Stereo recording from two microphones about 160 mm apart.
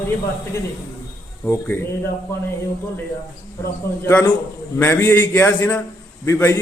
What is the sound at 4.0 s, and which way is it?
A man's voice, 10° left (ahead or behind).